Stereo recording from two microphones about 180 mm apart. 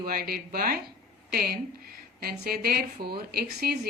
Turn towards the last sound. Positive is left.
turn(degrees=-65)  # may be behind; listen again after turning